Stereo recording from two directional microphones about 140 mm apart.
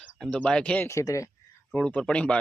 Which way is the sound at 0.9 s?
20° left (ahead or behind).